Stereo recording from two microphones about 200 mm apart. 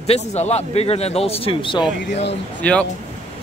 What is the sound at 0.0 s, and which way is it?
Speech, 30° left (ahead or behind).